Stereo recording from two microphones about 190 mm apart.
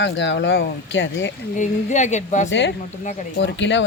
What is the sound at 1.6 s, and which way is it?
Speech, 40° left (ahead or behind).